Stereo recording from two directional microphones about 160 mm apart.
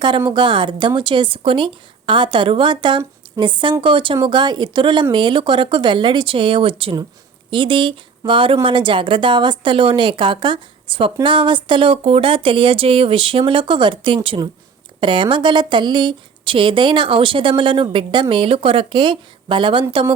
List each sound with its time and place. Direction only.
0.3 s speech: 30° right (ahead or behind)